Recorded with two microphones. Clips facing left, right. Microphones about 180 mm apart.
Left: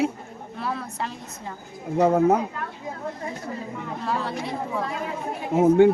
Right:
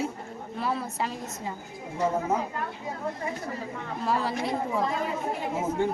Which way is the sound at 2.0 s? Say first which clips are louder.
Left 8 dB; 65° left (ahead or behind).